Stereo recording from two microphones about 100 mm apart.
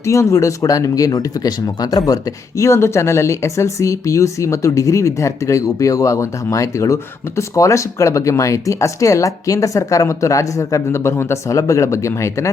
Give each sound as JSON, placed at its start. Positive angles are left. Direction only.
{"t": 0.0, "sound": "speech", "side_deg": 30}